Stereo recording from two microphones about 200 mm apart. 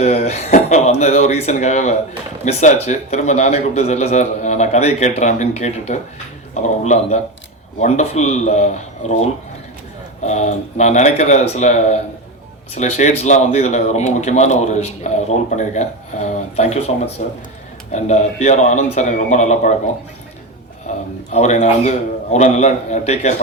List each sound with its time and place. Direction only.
0.0 s a man's voice: 30° left (ahead or behind)
20.9 s a man's voice: 35° left (ahead or behind)